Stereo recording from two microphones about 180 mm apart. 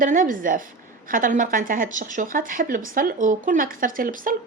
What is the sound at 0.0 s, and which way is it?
Speech, 45° right (ahead or behind).